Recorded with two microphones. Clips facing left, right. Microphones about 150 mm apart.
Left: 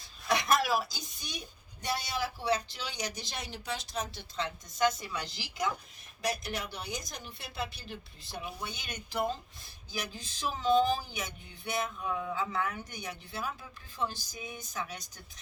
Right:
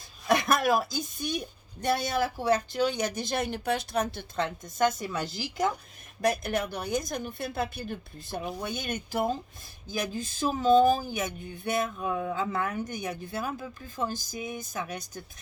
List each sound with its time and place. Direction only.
0.3 s a woman's voice: 50° right (ahead or behind)